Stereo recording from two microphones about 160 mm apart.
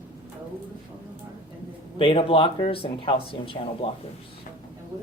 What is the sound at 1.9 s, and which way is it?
Speech, 35° left (ahead or behind).